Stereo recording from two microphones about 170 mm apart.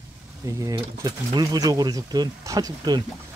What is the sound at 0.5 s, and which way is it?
Speech, 20° right (ahead or behind).